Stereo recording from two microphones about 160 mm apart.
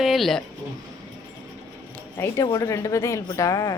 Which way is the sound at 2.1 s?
20° left (ahead or behind).